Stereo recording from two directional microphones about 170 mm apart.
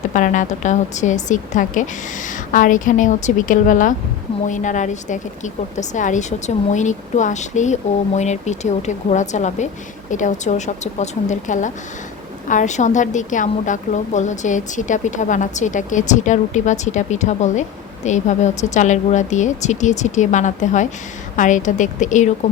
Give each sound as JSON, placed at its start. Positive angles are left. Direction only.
{"t": 0.1, "sound": "speech", "side_deg": 50}